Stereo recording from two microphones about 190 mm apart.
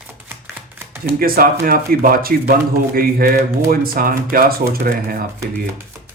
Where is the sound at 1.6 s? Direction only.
50° right (ahead or behind).